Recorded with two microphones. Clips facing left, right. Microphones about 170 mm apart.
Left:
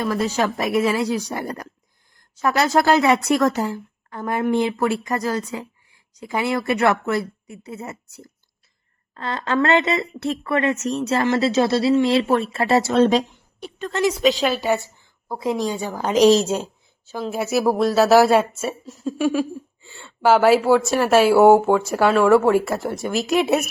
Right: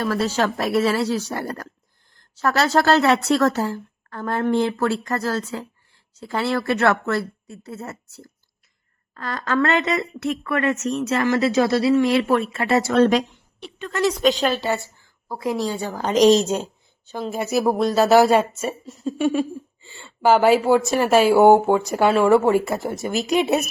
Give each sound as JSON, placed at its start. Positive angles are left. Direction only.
{"t": 0.2, "sound": "a woman's voice", "side_deg": 10}
{"t": 9.1, "sound": "speech", "side_deg": 25}
{"t": 13.6, "sound": "a sound", "side_deg": 40}
{"t": 14.0, "sound": "a woman's voice", "side_deg": 5}